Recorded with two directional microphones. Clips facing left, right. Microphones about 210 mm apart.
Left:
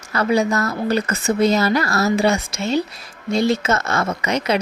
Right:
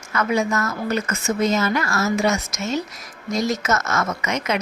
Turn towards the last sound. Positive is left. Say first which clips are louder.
# left 4 dB
turn(degrees=35)  # may be behind; listen again after turning